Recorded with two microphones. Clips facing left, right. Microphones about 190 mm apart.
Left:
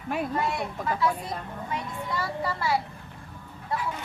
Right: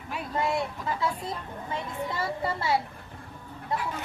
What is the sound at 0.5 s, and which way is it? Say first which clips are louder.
A child's voice: even; 25° right (ahead or behind).